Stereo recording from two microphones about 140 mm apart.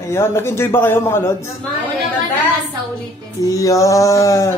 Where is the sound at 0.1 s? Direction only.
20° left (ahead or behind).